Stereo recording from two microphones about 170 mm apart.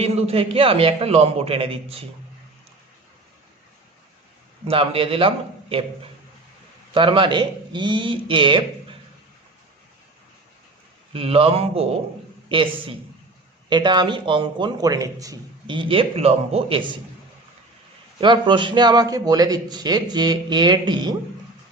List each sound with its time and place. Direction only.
0.0 s a man's voice: 35° right (ahead or behind)
4.7 s a man's voice: 35° right (ahead or behind)
11.1 s a man's voice: 35° right (ahead or behind)
18.2 s a man's voice: 30° right (ahead or behind)